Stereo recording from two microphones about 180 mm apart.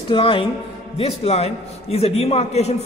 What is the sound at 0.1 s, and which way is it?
A man's voice, 25° left (ahead or behind).